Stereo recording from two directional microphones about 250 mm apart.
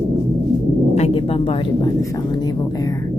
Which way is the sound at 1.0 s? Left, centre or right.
Left.